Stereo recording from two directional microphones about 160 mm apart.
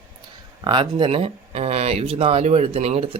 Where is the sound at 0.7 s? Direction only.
30° right (ahead or behind).